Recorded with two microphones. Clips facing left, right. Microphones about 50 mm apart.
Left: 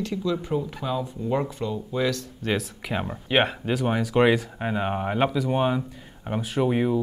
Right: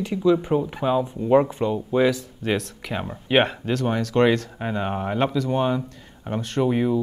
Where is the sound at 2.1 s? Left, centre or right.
Centre.